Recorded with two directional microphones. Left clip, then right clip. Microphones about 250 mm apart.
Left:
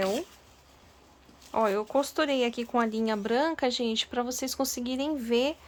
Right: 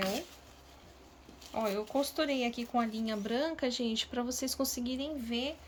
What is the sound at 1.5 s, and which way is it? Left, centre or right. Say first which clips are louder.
Speech: left 7 dB; centre.